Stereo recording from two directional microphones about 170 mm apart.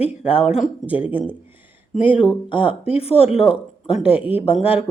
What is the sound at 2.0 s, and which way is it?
Speech, 30° left (ahead or behind).